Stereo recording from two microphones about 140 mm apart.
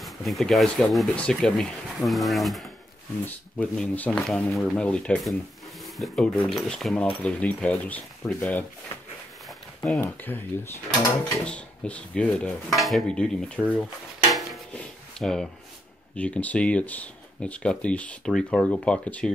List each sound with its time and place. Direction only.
0.0 s speech: centre (ahead or behind)
9.9 s speech: 15° left (ahead or behind)
14.3 s dishes: centre (ahead or behind)
16.2 s speech: 10° left (ahead or behind)